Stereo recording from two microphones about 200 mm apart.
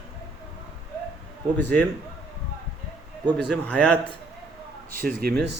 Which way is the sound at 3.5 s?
5° left (ahead or behind).